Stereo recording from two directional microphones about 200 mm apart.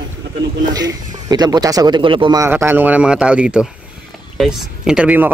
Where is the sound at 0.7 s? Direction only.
20° right (ahead or behind).